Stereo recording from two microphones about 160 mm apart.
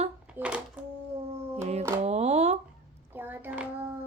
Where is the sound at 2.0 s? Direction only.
45° right (ahead or behind).